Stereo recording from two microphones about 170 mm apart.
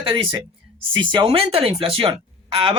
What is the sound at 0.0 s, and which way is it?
Speech, 30° right (ahead or behind).